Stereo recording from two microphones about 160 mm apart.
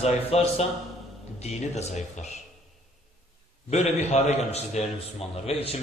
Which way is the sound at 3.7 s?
40° left (ahead or behind).